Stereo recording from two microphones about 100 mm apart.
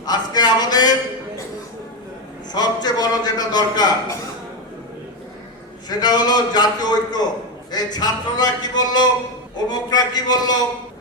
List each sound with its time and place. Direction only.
0.0 s speech: 40° left (ahead or behind)
2.5 s a man's voice: 40° left (ahead or behind)
5.9 s speech: 45° left (ahead or behind)